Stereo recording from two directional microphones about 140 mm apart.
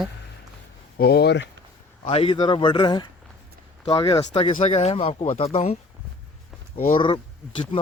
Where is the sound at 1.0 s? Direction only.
90° left.